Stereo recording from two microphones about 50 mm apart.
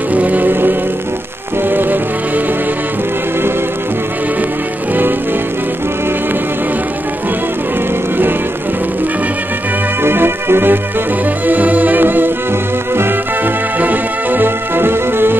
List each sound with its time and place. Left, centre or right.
0.1 s music: right
10.0 s music: right
11.4 s music: right
13.7 s music: right